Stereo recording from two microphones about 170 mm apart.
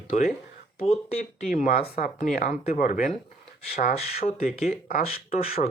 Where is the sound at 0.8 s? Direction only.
35° left (ahead or behind).